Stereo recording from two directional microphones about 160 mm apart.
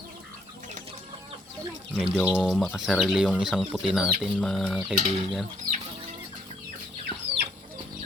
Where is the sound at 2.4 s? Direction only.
Centre (ahead or behind).